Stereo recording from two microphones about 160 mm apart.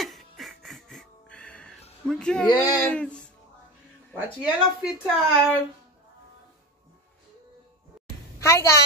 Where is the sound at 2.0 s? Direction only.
5° left (ahead or behind).